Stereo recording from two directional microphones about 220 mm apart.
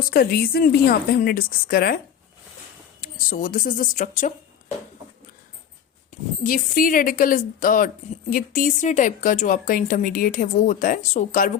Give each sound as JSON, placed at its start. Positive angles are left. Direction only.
{"t": 0.1, "sound": "a woman's voice", "side_deg": 45}
{"t": 3.0, "sound": "a woman's voice", "side_deg": 40}
{"t": 6.4, "sound": "a woman's voice", "side_deg": 40}